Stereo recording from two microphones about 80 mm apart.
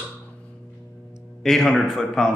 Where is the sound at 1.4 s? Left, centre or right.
Centre.